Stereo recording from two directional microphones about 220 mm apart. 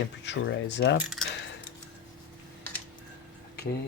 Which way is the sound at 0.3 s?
55° left (ahead or behind).